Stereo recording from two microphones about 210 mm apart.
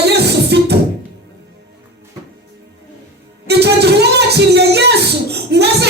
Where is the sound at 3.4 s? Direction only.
50° right (ahead or behind).